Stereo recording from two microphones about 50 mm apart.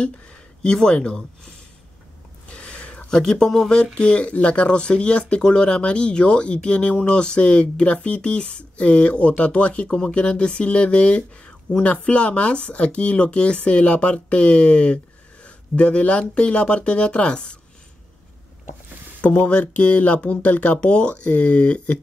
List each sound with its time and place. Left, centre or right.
0.6 s speech: centre
2.5 s a sound: left
3.7 s speech: centre
19.2 s speech: left